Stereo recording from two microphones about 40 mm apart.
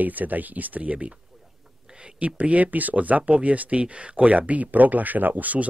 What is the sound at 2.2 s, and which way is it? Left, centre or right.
Speech, right.